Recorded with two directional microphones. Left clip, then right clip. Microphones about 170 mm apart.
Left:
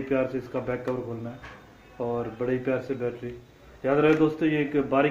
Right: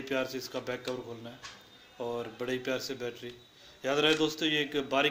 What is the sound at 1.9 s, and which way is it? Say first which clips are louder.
A man's voice: left 6 dB; 15° right (ahead or behind).